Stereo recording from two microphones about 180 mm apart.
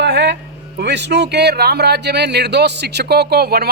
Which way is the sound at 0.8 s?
70° right (ahead or behind).